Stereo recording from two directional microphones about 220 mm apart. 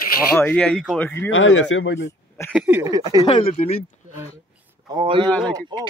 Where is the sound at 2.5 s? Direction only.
10° right (ahead or behind).